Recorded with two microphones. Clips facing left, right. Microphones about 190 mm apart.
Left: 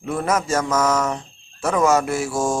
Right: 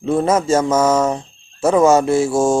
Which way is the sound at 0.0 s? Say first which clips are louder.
Right 6 dB; 25° right (ahead or behind).